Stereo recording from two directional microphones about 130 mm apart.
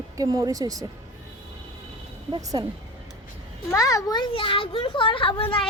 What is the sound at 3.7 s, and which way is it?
A child's voice, 25° left (ahead or behind).